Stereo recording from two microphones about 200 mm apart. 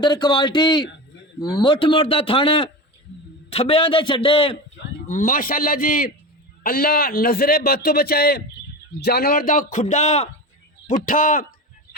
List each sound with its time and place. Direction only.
0.0 s a man's voice: 20° left (ahead or behind)
5.0 s a man's voice: 40° left (ahead or behind)